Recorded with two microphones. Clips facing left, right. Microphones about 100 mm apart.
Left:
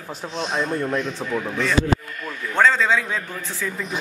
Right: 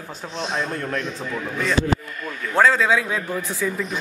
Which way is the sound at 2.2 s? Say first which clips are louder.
Right 2 dB; 5° right (ahead or behind).